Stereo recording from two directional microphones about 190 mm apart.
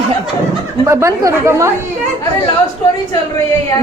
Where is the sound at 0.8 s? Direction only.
15° right (ahead or behind).